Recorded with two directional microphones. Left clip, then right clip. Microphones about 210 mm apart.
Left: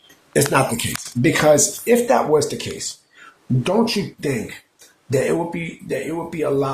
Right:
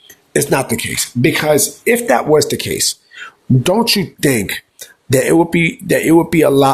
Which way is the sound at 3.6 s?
50° right (ahead or behind).